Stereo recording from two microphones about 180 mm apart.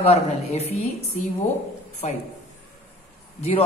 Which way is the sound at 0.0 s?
35° left (ahead or behind).